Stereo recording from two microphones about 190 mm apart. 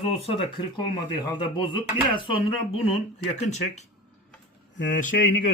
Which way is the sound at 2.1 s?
30° left (ahead or behind).